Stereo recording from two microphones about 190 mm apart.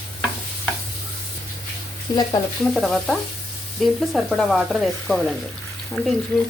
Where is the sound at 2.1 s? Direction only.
20° left (ahead or behind).